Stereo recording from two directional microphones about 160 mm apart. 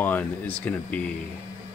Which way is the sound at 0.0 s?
10° left (ahead or behind).